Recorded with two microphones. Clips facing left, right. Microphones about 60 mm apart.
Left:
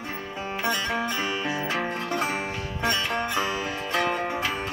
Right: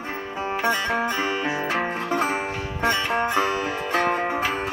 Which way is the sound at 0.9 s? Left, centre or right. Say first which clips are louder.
Right 4 dB; right.